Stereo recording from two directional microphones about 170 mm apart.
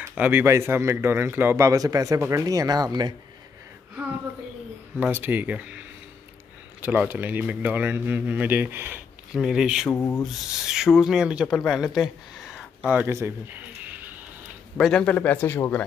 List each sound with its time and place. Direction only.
0.1 s speech: 10° right (ahead or behind); by 3.2 s 25° right (ahead or behind)
4.9 s speech: 10° right (ahead or behind)
9.8 s speech: 15° left (ahead or behind)
10.6 s speech: 5° right (ahead or behind)
14.8 s speech: 5° left (ahead or behind)